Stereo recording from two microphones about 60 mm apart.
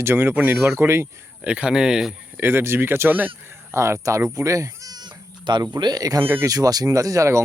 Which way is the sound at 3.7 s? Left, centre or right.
Right.